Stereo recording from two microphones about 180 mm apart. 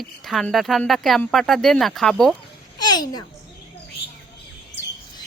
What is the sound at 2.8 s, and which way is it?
Speech, 25° left (ahead or behind).